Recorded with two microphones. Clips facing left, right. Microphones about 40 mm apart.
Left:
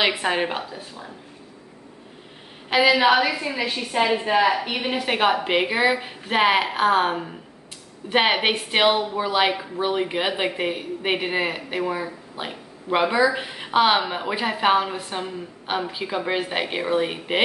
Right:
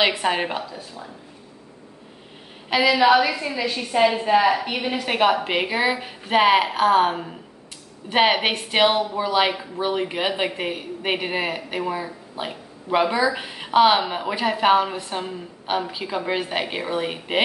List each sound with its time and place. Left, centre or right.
0.2 s a woman's voice: centre
2.8 s a woman's voice: left
3.1 s speech: centre
3.4 s a woman's voice: left
3.7 s speech: centre
4.4 s a woman's voice: centre